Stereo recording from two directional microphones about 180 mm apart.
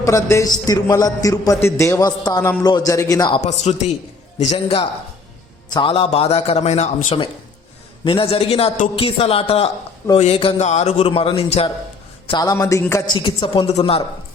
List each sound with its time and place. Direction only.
0.0 s a man's voice: 15° left (ahead or behind)
3.4 s a man's voice: 40° left (ahead or behind)
12.3 s a man's voice: 20° left (ahead or behind)
13.1 s a man's voice: 30° left (ahead or behind)